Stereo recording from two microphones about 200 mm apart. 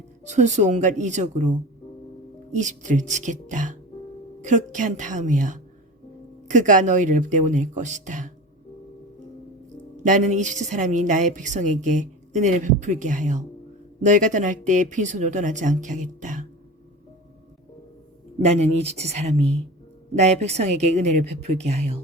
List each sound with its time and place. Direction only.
0.3 s a woman's voice: 35° right (ahead or behind)
2.6 s a woman's voice: 40° right (ahead or behind)
10.0 s a woman's voice: 40° right (ahead or behind)
18.4 s a woman's voice: 30° right (ahead or behind)